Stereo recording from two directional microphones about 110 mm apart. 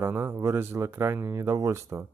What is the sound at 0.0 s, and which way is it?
Speech, 20° right (ahead or behind).